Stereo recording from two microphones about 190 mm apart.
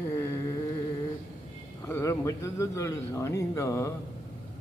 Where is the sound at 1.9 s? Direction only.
15° left (ahead or behind).